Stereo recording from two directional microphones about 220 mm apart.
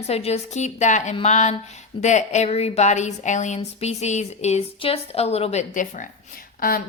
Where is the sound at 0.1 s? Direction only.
30° left (ahead or behind).